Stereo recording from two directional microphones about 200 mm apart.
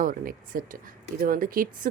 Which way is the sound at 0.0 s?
45° right (ahead or behind).